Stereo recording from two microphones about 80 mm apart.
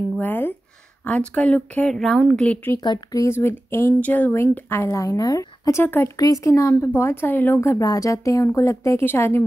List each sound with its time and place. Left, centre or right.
0.2 s speech: left
2.0 s a woman's voice: centre
2.4 s speech: centre
2.8 s speech: left
3.2 s speech: left
4.3 s speech: left
4.8 s speech: left
6.7 s speech: left
7.8 s speech: left